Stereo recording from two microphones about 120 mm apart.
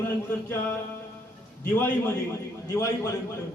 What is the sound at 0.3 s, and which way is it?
Speech, 20° left (ahead or behind).